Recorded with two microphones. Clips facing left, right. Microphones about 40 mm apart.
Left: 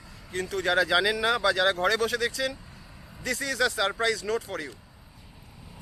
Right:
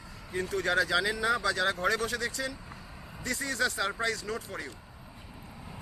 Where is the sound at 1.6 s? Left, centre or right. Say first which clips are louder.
Left 5 dB; left.